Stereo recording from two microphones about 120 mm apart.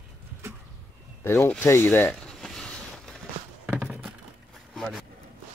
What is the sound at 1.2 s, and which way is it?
Speech, 20° left (ahead or behind).